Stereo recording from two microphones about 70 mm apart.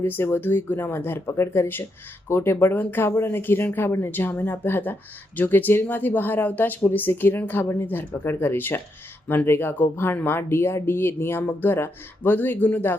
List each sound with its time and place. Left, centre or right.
0.0 s speech: left